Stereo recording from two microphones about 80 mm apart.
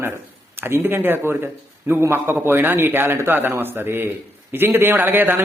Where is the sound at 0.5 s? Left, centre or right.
Right.